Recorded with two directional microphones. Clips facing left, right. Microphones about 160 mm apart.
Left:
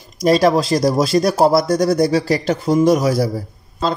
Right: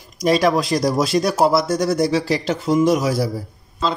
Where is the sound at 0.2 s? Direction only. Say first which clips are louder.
Left 3 dB; 35° left (ahead or behind).